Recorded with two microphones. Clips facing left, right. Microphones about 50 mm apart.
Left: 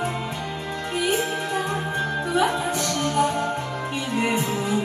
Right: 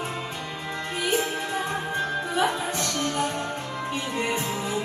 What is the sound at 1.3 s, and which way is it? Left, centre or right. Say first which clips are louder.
Music: left 3 dB; left.